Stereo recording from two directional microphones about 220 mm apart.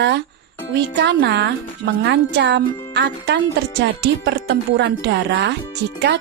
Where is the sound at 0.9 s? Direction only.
50° right (ahead or behind).